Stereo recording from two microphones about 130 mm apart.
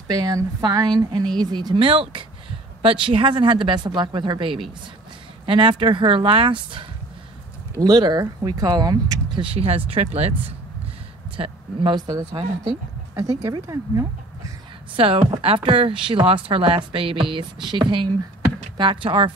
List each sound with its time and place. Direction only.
0.1 s speech: 30° right (ahead or behind); by 10.3 s 50° right (ahead or behind)
11.3 s speech: 45° right (ahead or behind)
13.4 s speech: 25° right (ahead or behind)
15.0 s speech: 45° right (ahead or behind)